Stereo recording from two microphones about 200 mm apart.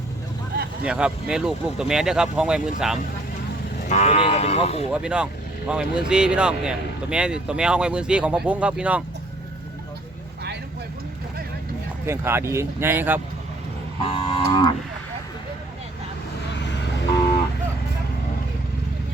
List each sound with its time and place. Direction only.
0.9 s speech: 5° right (ahead or behind)
3.8 s speech: 35° left (ahead or behind)
4.9 s speech: 5° right (ahead or behind)
12.0 s speech: 10° right (ahead or behind)
14.1 s moo: 25° left (ahead or behind)
16.6 s vehicle: 60° left (ahead or behind)